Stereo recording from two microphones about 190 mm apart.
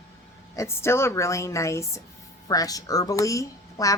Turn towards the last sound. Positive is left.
turn(degrees=15)  # may be behind; listen again after turning